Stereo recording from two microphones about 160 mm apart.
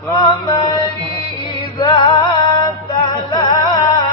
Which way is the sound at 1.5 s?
30° left (ahead or behind).